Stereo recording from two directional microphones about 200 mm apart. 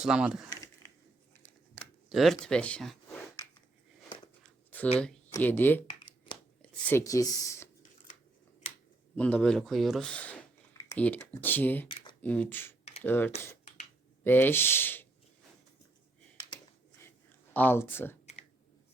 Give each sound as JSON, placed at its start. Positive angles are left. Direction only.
{"t": 0.0, "sound": "speech", "side_deg": -5}
{"t": 1.3, "sound": "scissors", "side_deg": 10}
{"t": 2.0, "sound": "speech", "side_deg": 0}
{"t": 4.4, "sound": "a sound", "side_deg": 10}
{"t": 5.3, "sound": "speech", "side_deg": 10}
{"t": 9.1, "sound": "speech", "side_deg": 5}
{"t": 11.9, "sound": "speech", "side_deg": 25}
{"t": 12.2, "sound": "speech", "side_deg": 10}
{"t": 17.5, "sound": "speech", "side_deg": 10}